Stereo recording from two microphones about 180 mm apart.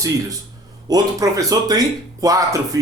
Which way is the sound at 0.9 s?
20° right (ahead or behind).